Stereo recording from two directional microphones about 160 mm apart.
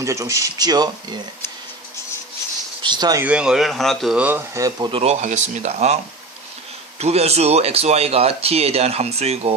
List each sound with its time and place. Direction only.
0.0 s speech: 20° right (ahead or behind)
2.8 s speech: 25° right (ahead or behind)
3.2 s speech: 5° right (ahead or behind); by 6.0 s 45° right (ahead or behind)
7.0 s speech: 40° right (ahead or behind)